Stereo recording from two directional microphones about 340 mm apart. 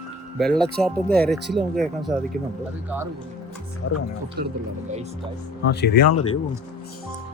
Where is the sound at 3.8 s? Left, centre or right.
Left.